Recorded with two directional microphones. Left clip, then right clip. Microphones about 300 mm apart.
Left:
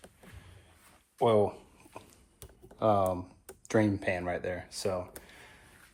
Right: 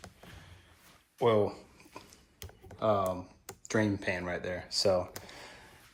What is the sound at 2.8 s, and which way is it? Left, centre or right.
Speech, centre.